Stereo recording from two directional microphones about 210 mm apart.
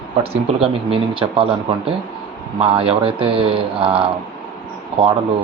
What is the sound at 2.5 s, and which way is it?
Speech, 25° right (ahead or behind).